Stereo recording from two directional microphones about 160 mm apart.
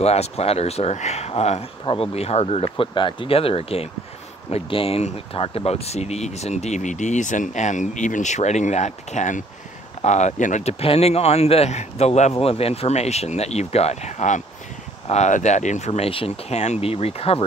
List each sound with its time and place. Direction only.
0.0 s speech: 40° left (ahead or behind)